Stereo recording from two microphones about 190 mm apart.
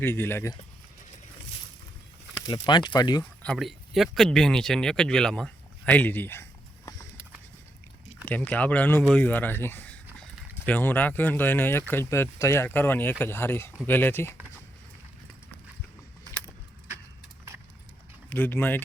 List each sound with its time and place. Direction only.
0.0 s speech: 10° left (ahead or behind)
2.5 s speech: 25° left (ahead or behind)
3.4 s speech: centre (ahead or behind)
6.8 s a sound: 15° left (ahead or behind)
8.2 s speech: 10° left (ahead or behind)
18.3 s speech: 10° left (ahead or behind)